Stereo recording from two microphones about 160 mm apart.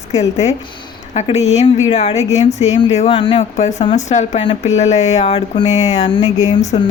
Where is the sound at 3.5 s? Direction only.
45° left (ahead or behind).